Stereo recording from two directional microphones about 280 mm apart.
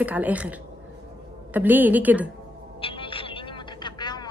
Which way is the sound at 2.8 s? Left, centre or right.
Centre.